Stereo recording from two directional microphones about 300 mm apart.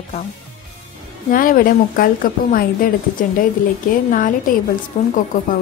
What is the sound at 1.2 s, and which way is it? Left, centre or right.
Speech, left.